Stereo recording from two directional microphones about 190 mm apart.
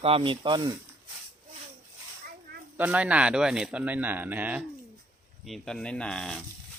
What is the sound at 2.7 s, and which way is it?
Speech, 10° right (ahead or behind).